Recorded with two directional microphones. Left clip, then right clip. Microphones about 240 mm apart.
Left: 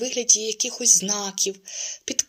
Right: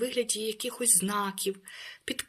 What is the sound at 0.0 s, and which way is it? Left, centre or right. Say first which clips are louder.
Speech: left 8 dB; centre.